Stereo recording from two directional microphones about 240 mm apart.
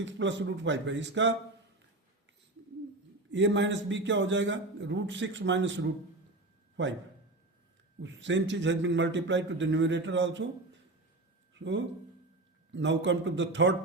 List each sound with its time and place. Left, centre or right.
0.0 s a man's voice: right
3.3 s a man's voice: right
6.8 s a man's voice: right
8.0 s a man's voice: right
11.5 s a man's voice: right